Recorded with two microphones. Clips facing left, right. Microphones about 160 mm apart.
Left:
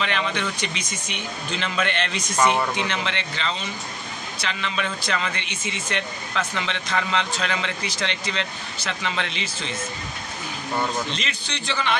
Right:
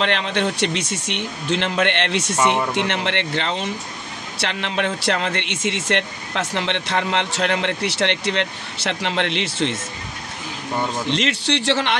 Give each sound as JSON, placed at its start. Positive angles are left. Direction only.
{"t": 0.0, "sound": "speech", "side_deg": -65}
{"t": 11.1, "sound": "speech", "side_deg": -75}